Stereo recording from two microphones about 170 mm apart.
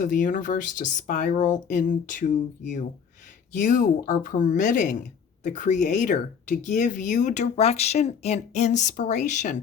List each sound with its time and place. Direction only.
0.0 s speech: 50° left (ahead or behind)